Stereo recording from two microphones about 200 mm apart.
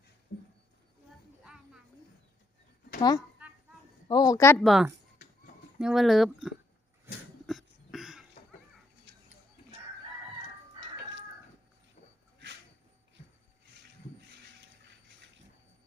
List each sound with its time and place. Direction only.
1.5 s music: 5° right (ahead or behind)
3.0 s speech: 20° left (ahead or behind)
4.6 s speech: centre (ahead or behind)
7.4 s cough: centre (ahead or behind)
9.1 s a sound: 60° right (ahead or behind)